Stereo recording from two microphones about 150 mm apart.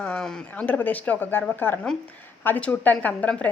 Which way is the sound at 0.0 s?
5° left (ahead or behind).